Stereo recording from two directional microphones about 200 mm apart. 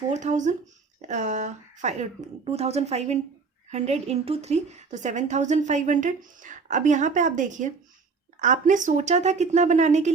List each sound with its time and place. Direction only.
0.1 s a woman's voice: 35° right (ahead or behind)